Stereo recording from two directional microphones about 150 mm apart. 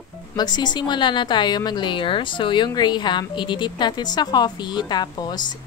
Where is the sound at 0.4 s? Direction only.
30° left (ahead or behind).